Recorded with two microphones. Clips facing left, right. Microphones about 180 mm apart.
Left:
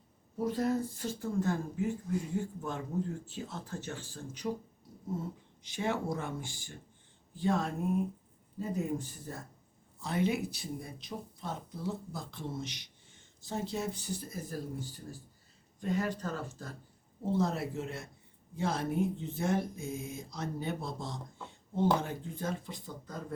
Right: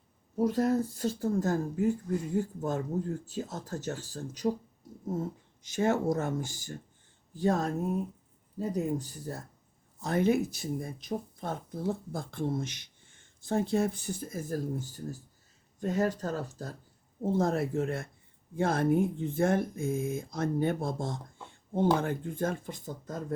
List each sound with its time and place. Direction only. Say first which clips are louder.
0.3 s speech: right 4 dB; 45° right (ahead or behind)
5.6 s speech: right 6 dB; 45° right (ahead or behind)